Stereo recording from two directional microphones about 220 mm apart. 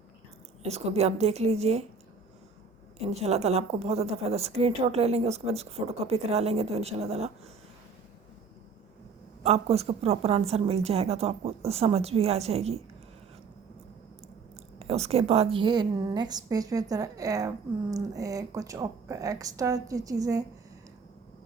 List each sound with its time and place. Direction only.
0.6 s a woman's voice: 30° right (ahead or behind)
3.0 s a woman's voice: 30° right (ahead or behind)
9.4 s a woman's voice: 30° right (ahead or behind)
14.8 s a woman's voice: 30° right (ahead or behind)